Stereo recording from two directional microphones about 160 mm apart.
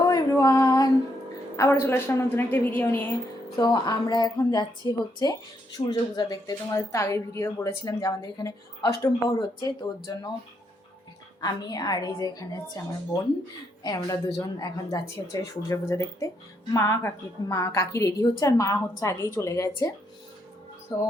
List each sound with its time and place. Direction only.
0.0 s a sound: 20° left (ahead or behind)
1.5 s a woman's voice: 15° left (ahead or behind)
3.6 s a woman's voice: 25° left (ahead or behind)
11.3 s a woman's voice: 25° left (ahead or behind)
20.9 s a woman's voice: 20° left (ahead or behind)